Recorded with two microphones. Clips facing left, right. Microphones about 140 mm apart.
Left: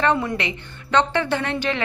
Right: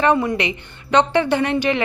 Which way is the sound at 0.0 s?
10° right (ahead or behind).